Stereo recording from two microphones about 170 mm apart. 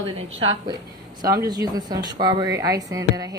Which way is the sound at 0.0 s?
35° right (ahead or behind).